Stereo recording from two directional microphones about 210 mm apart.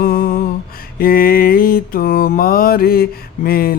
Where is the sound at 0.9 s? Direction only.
45° left (ahead or behind).